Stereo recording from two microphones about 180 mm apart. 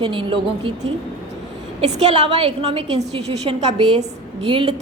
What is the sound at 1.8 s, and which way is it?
A woman's voice, 35° right (ahead or behind).